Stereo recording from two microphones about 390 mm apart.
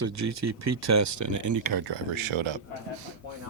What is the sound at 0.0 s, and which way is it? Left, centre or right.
Speech, right.